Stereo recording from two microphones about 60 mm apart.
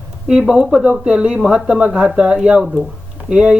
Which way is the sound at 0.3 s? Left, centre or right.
Centre.